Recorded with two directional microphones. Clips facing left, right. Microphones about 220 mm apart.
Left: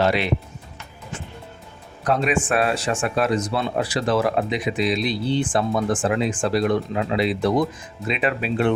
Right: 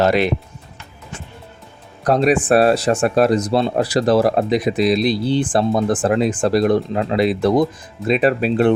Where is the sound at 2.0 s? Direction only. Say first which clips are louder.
Right 6 dB; 40° right (ahead or behind).